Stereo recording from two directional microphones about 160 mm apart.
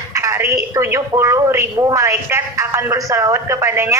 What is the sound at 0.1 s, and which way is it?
A woman's voice, 20° right (ahead or behind).